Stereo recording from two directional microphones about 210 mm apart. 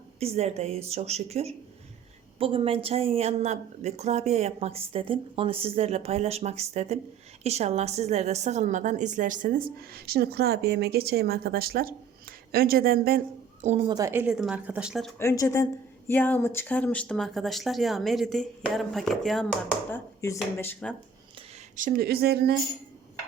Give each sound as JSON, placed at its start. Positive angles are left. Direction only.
{"t": 0.2, "sound": "a woman's voice", "side_deg": -30}
{"t": 15.2, "sound": "speech", "side_deg": 15}
{"t": 20.2, "sound": "speech", "side_deg": 10}
{"t": 21.8, "sound": "speech", "side_deg": -40}